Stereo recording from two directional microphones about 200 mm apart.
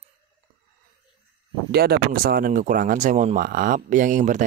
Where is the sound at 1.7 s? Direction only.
50° right (ahead or behind).